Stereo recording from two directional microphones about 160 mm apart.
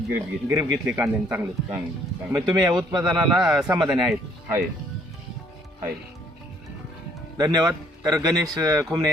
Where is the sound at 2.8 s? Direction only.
5° right (ahead or behind).